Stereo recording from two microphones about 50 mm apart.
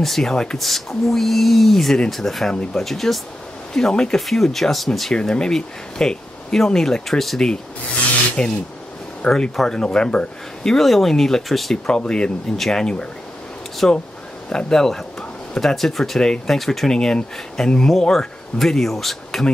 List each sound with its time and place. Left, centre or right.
0.0 s speech: centre
5.1 s speech: centre
11.7 s speech: centre
12.5 s speech: centre
13.8 s speech: centre